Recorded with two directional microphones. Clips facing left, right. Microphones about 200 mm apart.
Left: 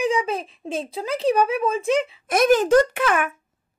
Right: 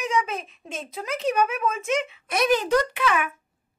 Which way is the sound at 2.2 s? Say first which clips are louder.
Left 5 dB; 45° left (ahead or behind).